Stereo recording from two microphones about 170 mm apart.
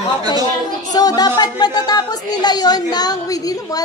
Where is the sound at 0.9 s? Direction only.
25° left (ahead or behind).